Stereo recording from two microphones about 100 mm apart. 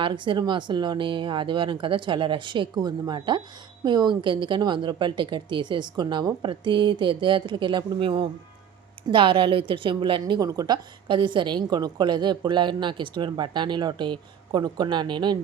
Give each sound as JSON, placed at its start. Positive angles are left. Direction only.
{"t": 0.0, "sound": "a woman's voice", "side_deg": -55}